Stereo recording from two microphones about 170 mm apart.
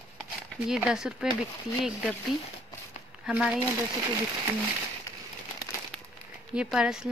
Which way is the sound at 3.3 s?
5° right (ahead or behind).